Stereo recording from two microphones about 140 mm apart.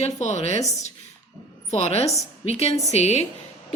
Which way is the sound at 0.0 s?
55° left (ahead or behind).